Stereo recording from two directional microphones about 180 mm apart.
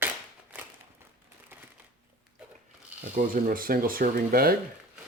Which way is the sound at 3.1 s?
50° right (ahead or behind).